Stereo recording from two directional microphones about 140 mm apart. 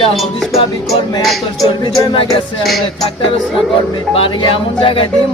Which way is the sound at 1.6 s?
30° left (ahead or behind).